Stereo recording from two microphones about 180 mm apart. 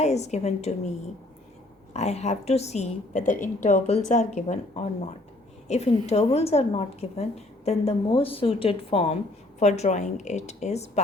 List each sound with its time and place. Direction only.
0.0 s a woman's voice: 40° left (ahead or behind)
1.9 s a woman's voice: 40° left (ahead or behind)